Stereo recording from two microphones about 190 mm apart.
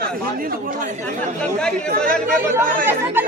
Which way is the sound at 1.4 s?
5° left (ahead or behind).